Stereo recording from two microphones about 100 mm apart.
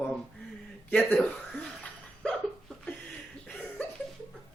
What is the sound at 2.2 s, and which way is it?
Hiccup, 5° left (ahead or behind).